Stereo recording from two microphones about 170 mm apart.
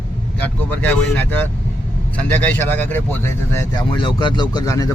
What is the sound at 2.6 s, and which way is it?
Speech, 10° left (ahead or behind).